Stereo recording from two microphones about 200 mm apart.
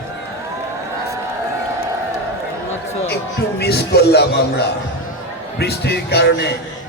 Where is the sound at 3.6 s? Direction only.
55° left (ahead or behind).